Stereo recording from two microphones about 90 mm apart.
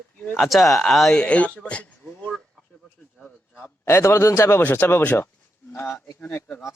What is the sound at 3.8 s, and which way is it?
Speech, 30° left (ahead or behind).